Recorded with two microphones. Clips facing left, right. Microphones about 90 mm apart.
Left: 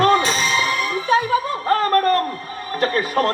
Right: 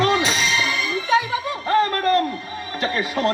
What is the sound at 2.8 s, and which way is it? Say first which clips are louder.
Speech: left 4 dB; 50° left (ahead or behind).